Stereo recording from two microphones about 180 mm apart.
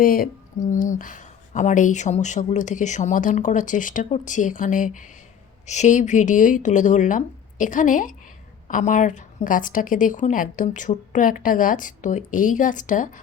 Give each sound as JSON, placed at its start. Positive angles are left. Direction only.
{"t": 0.0, "sound": "speech", "side_deg": 50}